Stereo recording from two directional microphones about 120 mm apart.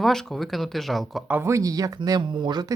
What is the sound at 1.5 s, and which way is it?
Speech, 30° right (ahead or behind).